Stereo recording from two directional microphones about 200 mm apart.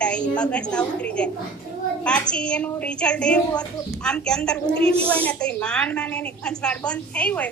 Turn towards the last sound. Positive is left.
turn(degrees=5)  # may be behind; listen again after turning